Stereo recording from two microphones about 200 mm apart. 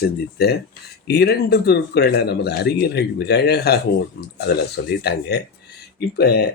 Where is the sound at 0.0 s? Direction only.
55° left (ahead or behind).